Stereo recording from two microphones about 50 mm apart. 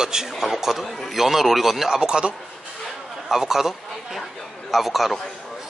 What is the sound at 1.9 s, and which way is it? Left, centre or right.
Speech, centre.